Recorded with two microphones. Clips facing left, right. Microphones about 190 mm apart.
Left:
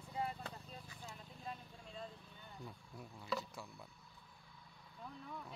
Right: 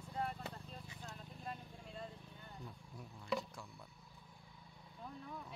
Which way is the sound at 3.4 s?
5° left (ahead or behind).